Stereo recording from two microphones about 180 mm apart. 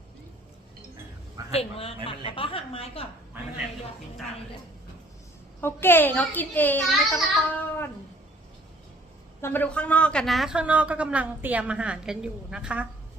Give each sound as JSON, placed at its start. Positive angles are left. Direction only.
{"t": 1.5, "sound": "speech", "side_deg": 35}
{"t": 5.5, "sound": "a child's voice", "side_deg": 10}
{"t": 9.4, "sound": "a woman's voice", "side_deg": 10}